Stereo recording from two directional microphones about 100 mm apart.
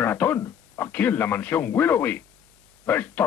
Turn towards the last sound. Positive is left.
turn(degrees=20)  # may be behind; listen again after turning